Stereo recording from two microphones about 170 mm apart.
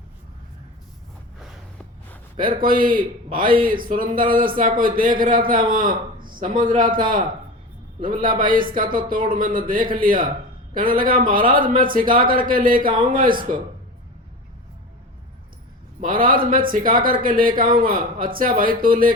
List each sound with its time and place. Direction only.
2.3 s a man's voice: 55° right (ahead or behind)
8.2 s a man's voice: 55° right (ahead or behind)
16.0 s a man's voice: 55° right (ahead or behind)